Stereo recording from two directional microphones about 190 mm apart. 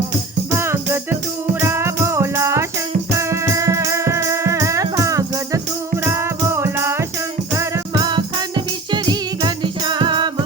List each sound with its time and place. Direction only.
0.5 s music: 15° right (ahead or behind)